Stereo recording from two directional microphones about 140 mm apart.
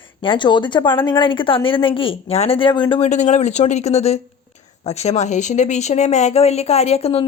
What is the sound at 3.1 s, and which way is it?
Speech, 55° left (ahead or behind).